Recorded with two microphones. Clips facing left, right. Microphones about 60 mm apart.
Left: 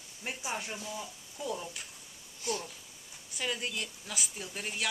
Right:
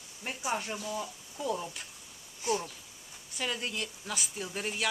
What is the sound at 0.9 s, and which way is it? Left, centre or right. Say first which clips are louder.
Speech: right 4 dB; right.